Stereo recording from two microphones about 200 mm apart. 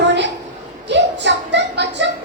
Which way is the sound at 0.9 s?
60° right (ahead or behind).